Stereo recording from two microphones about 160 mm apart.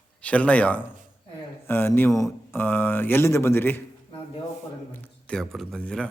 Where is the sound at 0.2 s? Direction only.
10° left (ahead or behind).